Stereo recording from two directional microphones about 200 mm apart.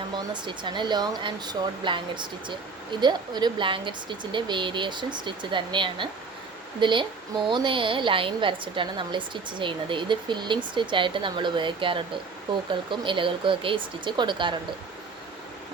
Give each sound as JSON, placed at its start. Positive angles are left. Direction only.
{"t": 0.4, "sound": "a woman's voice", "side_deg": -25}